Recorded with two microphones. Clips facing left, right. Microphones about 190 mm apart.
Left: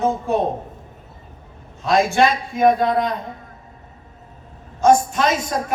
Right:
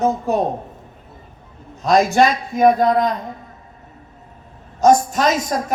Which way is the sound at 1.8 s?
40° right (ahead or behind).